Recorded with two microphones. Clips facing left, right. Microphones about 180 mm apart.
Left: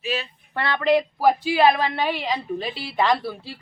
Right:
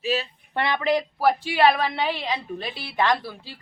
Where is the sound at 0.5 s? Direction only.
15° right (ahead or behind).